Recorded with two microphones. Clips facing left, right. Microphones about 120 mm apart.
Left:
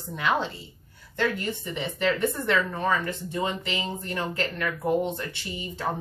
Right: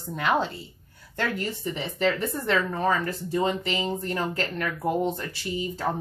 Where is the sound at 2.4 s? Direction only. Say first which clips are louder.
Right 3 dB; 35° right (ahead or behind).